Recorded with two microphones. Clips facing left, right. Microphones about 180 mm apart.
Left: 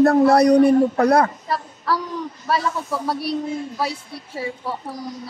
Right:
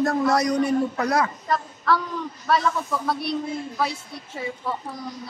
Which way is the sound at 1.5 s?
35° left (ahead or behind).